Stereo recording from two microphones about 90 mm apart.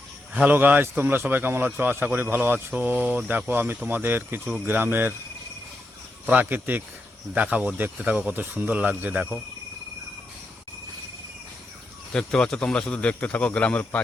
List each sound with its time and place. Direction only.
0.4 s speech: 20° right (ahead or behind)
6.2 s speech: 20° right (ahead or behind)
12.1 s speech: 5° left (ahead or behind)